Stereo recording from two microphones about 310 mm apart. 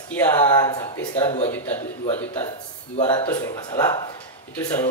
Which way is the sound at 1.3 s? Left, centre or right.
Centre.